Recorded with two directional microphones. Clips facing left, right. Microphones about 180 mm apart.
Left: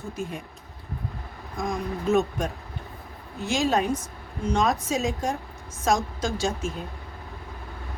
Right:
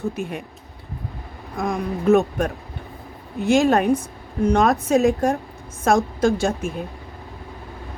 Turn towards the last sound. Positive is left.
turn(degrees=-55)  # may be behind; listen again after turning